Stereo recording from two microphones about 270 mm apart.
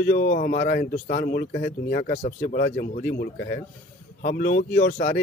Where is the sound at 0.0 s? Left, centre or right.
Left.